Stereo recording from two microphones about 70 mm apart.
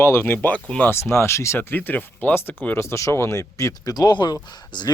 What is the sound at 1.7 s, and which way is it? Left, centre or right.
Speech, left.